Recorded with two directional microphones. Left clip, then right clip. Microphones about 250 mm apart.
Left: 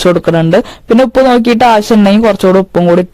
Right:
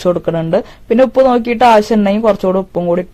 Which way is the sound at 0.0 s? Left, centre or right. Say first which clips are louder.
Left 6 dB; left.